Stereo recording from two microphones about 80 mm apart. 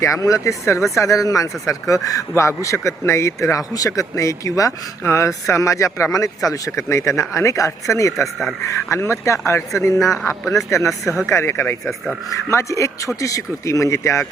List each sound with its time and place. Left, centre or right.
0.0 s speech: left